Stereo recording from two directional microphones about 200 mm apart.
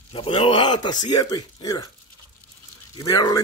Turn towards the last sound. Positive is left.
turn(degrees=20)  # may be behind; listen again after turning